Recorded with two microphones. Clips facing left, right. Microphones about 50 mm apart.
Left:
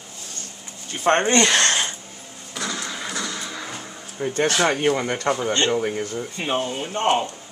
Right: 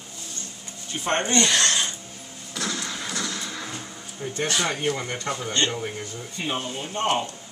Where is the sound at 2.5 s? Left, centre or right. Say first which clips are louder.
Left 1 dB; centre.